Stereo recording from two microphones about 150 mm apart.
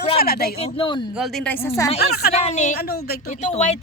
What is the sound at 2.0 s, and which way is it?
Speech, 90° left.